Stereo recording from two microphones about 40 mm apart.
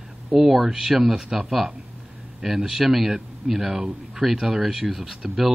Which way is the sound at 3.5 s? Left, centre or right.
Right.